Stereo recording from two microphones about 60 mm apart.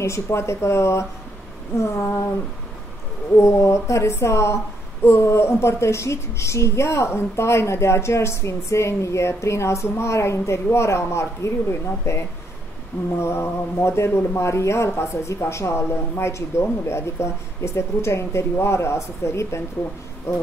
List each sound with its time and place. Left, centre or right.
0.0 s a woman's voice: left
3.3 s a woman's voice: left
13.2 s a woman's voice: left